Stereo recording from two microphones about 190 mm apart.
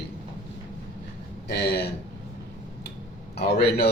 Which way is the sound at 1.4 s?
60° left (ahead or behind).